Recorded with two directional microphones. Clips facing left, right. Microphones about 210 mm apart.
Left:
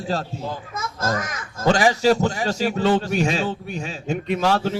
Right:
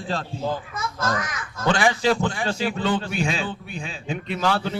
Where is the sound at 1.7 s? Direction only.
40° left (ahead or behind).